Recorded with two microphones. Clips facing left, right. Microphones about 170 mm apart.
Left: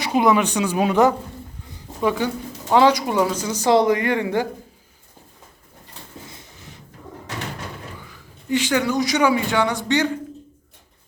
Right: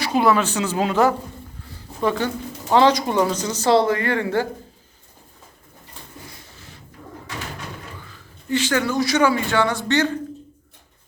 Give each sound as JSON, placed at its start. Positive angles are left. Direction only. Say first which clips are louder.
{"t": 0.0, "sound": "speech", "louder": "left 1 dB", "side_deg": 20}
{"t": 1.6, "sound": "a sound", "louder": "left 1 dB", "side_deg": 15}
{"t": 2.7, "sound": "speech", "louder": "even", "side_deg": 10}
{"t": 6.2, "sound": "drawer open or close", "louder": "left 1 dB", "side_deg": 20}
{"t": 8.0, "sound": "a man's voice", "louder": "left 1 dB", "side_deg": 15}